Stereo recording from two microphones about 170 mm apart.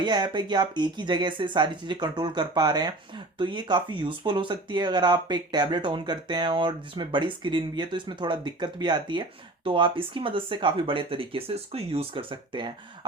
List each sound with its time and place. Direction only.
0.0 s speech: 25° right (ahead or behind)